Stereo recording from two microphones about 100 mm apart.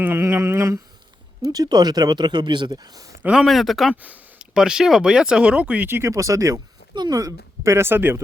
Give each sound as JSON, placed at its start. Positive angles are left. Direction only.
{"t": 0.0, "sound": "speech", "side_deg": -20}
{"t": 1.4, "sound": "speech", "side_deg": -40}
{"t": 3.2, "sound": "speech", "side_deg": -5}
{"t": 4.0, "sound": "speech", "side_deg": -15}